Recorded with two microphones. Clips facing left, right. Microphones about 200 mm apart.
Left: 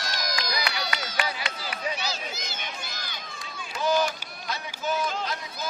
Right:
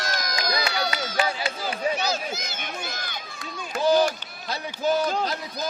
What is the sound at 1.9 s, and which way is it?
Run, 50° right (ahead or behind).